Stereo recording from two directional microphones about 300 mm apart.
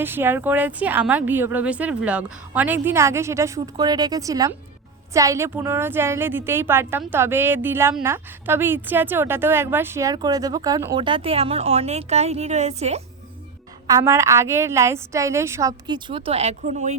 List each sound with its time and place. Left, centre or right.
0.0 s a woman's voice: centre
13.8 s a woman's voice: centre